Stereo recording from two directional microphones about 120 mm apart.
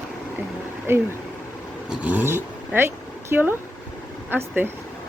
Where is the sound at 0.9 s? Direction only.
20° right (ahead or behind).